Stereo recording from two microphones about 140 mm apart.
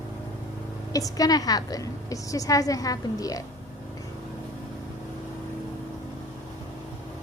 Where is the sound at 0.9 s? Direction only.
25° left (ahead or behind).